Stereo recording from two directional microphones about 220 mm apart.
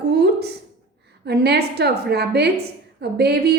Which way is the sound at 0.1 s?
50° right (ahead or behind).